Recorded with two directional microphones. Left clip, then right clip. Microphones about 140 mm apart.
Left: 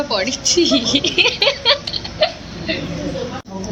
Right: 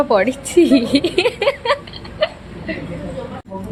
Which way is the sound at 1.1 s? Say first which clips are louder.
Left 2 dB; 20° right (ahead or behind).